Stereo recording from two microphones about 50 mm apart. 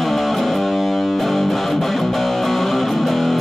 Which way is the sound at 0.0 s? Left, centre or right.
Centre.